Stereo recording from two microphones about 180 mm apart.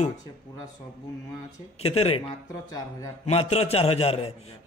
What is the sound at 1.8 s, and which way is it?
Speech, 35° left (ahead or behind).